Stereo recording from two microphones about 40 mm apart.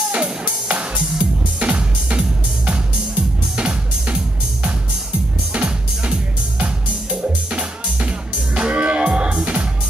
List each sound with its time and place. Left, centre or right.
0.2 s music: right
5.5 s music: right